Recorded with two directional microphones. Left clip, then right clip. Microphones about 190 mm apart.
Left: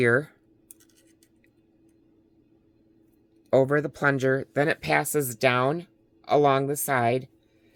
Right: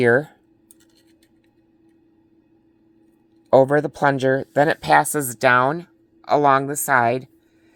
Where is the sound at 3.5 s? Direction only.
15° right (ahead or behind).